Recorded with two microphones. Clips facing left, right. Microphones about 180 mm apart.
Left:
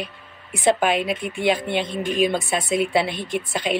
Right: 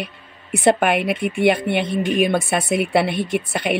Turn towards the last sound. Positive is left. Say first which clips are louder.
# right 3 dB
turn(degrees=-60)  # may be behind; listen again after turning